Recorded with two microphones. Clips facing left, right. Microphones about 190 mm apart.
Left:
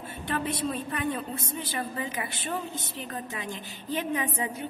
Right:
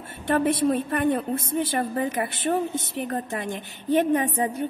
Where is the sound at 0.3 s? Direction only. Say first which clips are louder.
Right 9 dB; 60° right (ahead or behind).